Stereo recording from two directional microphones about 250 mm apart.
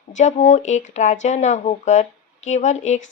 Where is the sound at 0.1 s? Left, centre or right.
Left.